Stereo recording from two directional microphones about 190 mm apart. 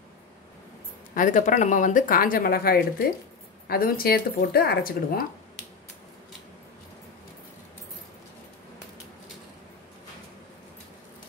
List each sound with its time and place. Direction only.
1.1 s speech: 45° left (ahead or behind)